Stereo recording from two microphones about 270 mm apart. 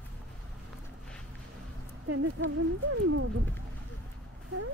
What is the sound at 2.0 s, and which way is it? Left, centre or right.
Speech, right.